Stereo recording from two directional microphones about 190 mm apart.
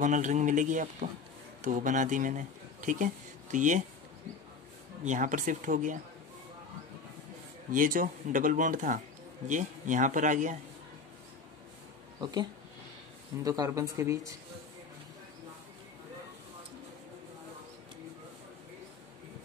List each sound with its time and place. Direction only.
0.0 s speech: 40° right (ahead or behind)
5.0 s speech: 40° right (ahead or behind)
7.7 s speech: 45° right (ahead or behind)
12.2 s speech: 20° right (ahead or behind)